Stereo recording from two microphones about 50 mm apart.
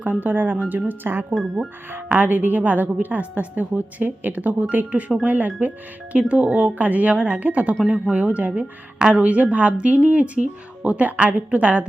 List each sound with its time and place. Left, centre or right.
0.0 s a woman's voice: right
6.1 s speech: right